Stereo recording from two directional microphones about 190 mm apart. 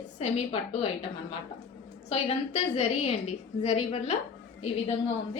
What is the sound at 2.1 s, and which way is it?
A woman's voice, 30° left (ahead or behind).